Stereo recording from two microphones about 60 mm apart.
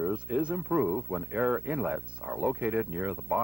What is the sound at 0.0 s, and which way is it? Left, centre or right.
Speech, centre.